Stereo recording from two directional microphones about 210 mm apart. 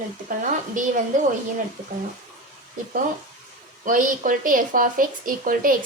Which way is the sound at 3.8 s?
40° right (ahead or behind).